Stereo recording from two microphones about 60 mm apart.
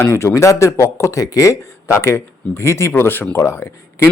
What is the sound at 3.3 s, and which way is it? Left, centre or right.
Speech, left.